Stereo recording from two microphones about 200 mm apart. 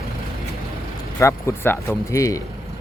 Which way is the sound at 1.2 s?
15° left (ahead or behind).